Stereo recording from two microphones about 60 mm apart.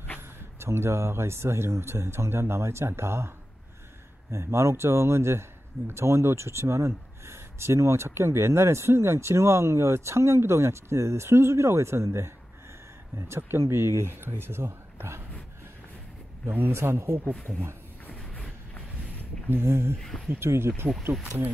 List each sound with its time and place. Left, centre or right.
0.6 s speech: right
13.4 s speech: right
16.4 s speech: right
19.5 s speech: right
20.0 s speech: centre
20.3 s speech: right